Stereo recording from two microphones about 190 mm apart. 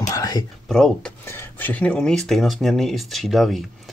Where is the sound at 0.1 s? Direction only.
20° left (ahead or behind).